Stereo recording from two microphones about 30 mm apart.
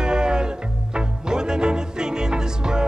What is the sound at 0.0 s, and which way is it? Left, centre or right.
Music, right.